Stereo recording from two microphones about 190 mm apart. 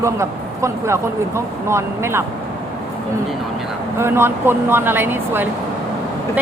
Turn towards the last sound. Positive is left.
turn(degrees=-10)  # may be behind; listen again after turning